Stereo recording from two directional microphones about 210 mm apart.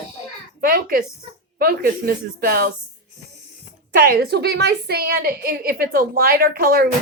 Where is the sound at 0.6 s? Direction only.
45° right (ahead or behind).